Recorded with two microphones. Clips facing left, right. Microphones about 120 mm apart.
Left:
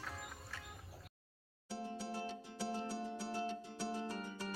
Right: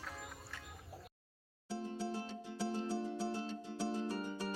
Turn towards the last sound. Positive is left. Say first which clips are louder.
# right 3 dB
turn(degrees=-15)  # may be behind; listen again after turning